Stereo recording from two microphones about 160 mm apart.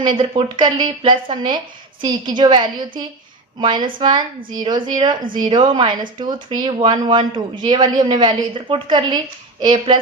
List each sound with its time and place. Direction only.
0.2 s speech: 35° right (ahead or behind)